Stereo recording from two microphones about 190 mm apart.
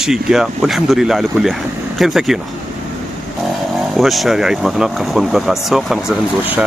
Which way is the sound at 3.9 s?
Centre (ahead or behind).